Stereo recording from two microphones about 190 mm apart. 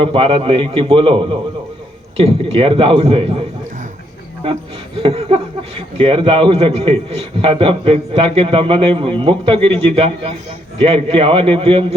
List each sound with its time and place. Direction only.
0.0 s a man's voice: 30° right (ahead or behind)
4.9 s a man's voice: 30° right (ahead or behind)